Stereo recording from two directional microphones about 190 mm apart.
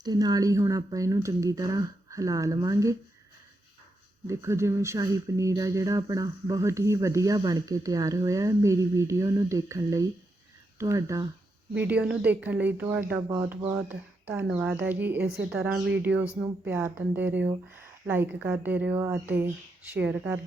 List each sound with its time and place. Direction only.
0.0 s speech: 20° right (ahead or behind)
4.3 s speech: 15° right (ahead or behind)